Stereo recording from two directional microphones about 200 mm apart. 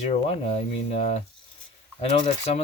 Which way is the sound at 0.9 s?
30° left (ahead or behind).